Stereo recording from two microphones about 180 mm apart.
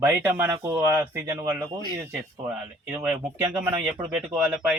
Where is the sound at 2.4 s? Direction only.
5° right (ahead or behind).